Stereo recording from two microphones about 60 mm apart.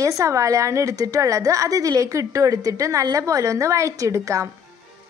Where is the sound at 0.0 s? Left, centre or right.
Right.